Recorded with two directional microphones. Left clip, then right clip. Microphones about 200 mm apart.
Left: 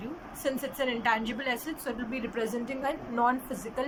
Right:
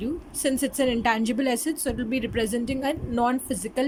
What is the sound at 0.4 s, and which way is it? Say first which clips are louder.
A woman's voice: right 6 dB; 60° right (ahead or behind).